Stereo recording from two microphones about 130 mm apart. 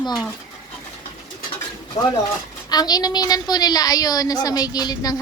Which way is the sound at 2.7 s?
30° left (ahead or behind).